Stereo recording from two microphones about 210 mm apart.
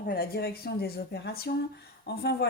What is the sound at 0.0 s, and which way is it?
Speech, 45° left (ahead or behind).